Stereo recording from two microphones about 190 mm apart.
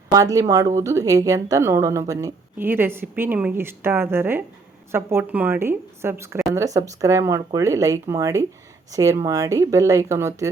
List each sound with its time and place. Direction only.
0.1 s a woman's voice: 15° right (ahead or behind)